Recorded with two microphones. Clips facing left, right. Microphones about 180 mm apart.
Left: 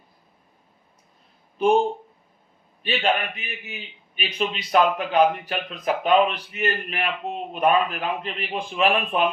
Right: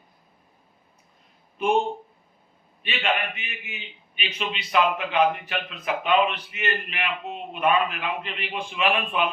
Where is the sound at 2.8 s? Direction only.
35° left (ahead or behind).